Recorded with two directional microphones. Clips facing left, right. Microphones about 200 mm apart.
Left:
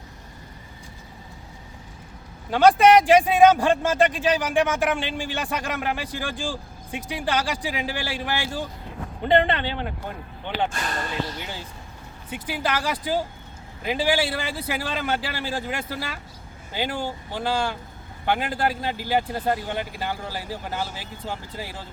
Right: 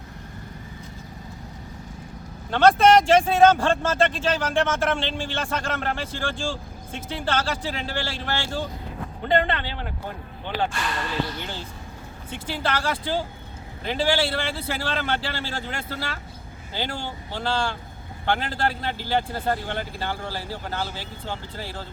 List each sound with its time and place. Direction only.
2.5 s speech: 10° left (ahead or behind)
10.7 s speech: 40° left (ahead or behind)
11.3 s speech: 10° left (ahead or behind)
17.3 s speech: 10° left (ahead or behind)